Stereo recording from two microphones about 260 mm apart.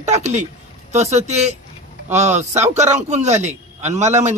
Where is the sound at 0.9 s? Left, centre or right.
Right.